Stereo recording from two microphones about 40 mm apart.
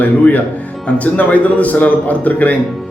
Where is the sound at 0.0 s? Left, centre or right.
Left.